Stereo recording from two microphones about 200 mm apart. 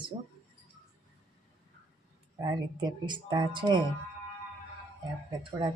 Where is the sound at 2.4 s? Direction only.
20° right (ahead or behind).